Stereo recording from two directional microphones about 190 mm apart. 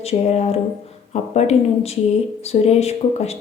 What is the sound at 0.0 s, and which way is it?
A woman's voice, 35° left (ahead or behind).